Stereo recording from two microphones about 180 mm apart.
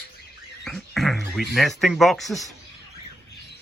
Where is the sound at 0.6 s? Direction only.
Centre (ahead or behind).